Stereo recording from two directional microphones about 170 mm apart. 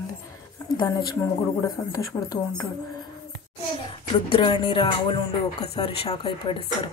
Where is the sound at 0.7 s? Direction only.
25° left (ahead or behind).